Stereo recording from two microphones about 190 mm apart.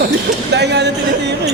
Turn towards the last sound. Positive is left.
turn(degrees=-65)  # may be behind; listen again after turning